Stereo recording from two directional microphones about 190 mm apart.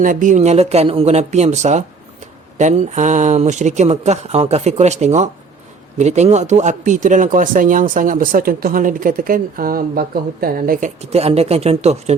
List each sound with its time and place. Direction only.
0.0 s speech: 45° right (ahead or behind)